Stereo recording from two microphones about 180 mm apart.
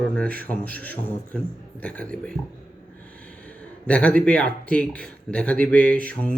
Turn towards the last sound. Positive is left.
turn(degrees=10)  # may be behind; listen again after turning